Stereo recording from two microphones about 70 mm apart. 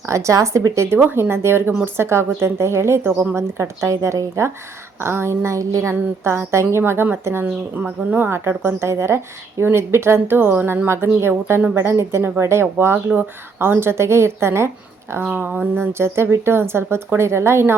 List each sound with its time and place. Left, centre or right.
0.0 s a woman's voice: right
0.9 s speech: right
7.4 s speech: centre
8.1 s speech: right
15.1 s speech: right